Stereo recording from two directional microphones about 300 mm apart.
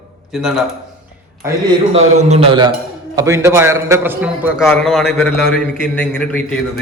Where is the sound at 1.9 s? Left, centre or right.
Right.